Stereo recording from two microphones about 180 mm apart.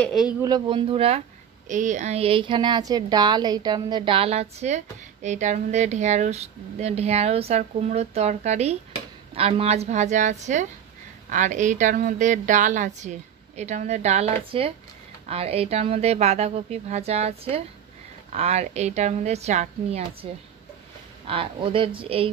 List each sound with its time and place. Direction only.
0.0 s speech: centre (ahead or behind)
0.4 s speech: 25° right (ahead or behind)
1.7 s a woman's voice: 45° right (ahead or behind)
21.3 s a woman's voice: 30° right (ahead or behind)